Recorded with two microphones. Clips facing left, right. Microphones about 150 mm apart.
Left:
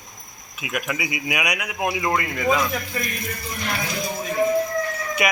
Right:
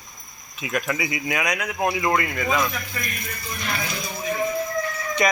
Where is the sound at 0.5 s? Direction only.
10° left (ahead or behind).